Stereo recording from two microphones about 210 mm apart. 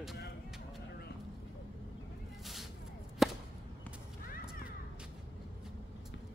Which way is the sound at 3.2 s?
Centre (ahead or behind).